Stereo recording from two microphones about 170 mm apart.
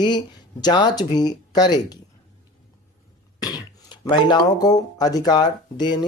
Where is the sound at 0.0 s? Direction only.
25° left (ahead or behind).